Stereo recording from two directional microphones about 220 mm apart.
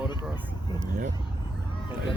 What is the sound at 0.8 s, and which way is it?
Speech, 35° right (ahead or behind).